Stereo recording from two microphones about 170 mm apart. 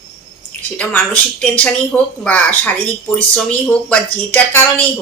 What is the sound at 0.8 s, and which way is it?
Speech, 10° left (ahead or behind).